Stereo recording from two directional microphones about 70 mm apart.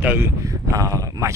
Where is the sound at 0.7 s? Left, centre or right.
Right.